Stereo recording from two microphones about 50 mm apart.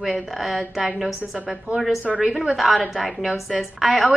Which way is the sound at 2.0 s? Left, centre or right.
Centre.